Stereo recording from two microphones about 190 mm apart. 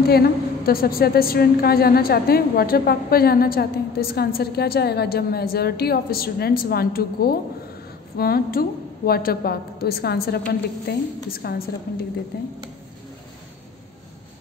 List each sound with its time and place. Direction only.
0.1 s a woman's voice: 50° left (ahead or behind)